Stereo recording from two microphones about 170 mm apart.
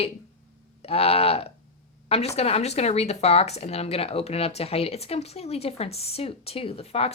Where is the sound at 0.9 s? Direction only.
35° left (ahead or behind).